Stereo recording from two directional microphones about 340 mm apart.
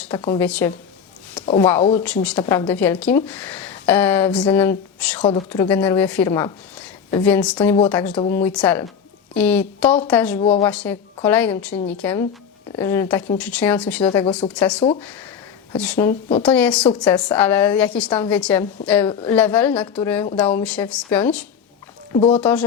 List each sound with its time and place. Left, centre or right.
0.2 s a woman's voice: centre
22.1 s speech: centre
22.4 s a woman's voice: centre